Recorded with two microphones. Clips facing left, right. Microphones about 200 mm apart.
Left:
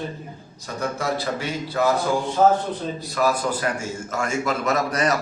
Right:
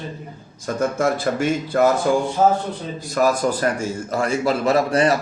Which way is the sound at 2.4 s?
10° right (ahead or behind).